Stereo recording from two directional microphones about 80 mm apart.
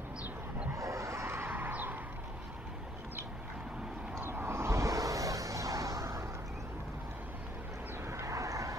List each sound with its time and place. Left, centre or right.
0.7 s a sound: right
4.2 s vehicle: right
8.1 s vehicle: right